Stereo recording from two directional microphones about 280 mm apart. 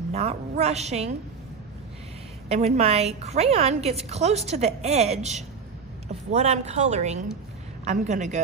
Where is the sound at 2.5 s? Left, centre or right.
Right.